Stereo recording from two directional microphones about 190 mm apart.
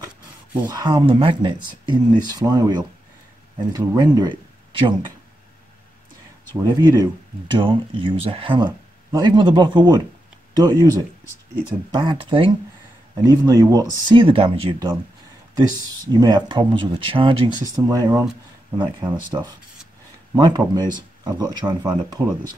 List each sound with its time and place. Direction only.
0.7 s speech: 20° right (ahead or behind)
6.5 s speech: 20° right (ahead or behind)
20.3 s speech: 20° right (ahead or behind)